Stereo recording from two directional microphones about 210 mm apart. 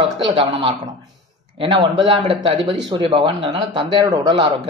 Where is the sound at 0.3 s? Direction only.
25° right (ahead or behind).